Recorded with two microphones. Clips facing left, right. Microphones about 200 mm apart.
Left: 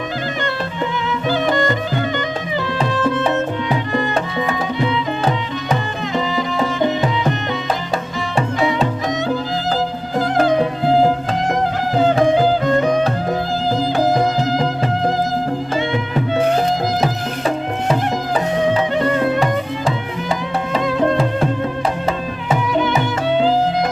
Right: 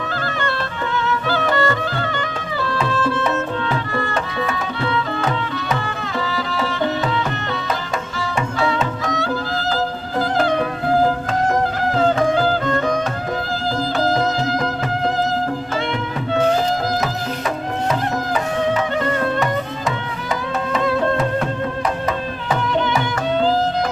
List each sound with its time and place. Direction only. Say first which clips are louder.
1.3 s music: left 3 dB; 15° left (ahead or behind)
9.0 s music: left 2 dB; 20° left (ahead or behind)
10.6 s music: left 3 dB; 25° left (ahead or behind)
12.3 s music: left 3 dB; 20° left (ahead or behind)
20.8 s music: left 2 dB; 15° left (ahead or behind)
22.9 s music: left 2 dB; 10° left (ahead or behind)